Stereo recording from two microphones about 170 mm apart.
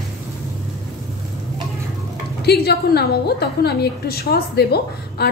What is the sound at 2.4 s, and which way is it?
A woman's voice, 70° left (ahead or behind).